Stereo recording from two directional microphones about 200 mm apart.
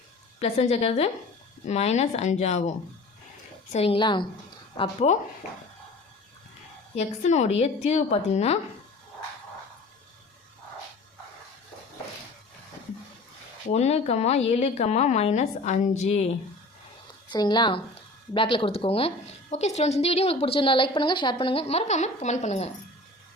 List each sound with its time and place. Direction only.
0.3 s a woman's voice: 30° left (ahead or behind)
6.9 s a woman's voice: 35° left (ahead or behind)
13.7 s a woman's voice: 30° left (ahead or behind)
17.2 s speech: 20° left (ahead or behind)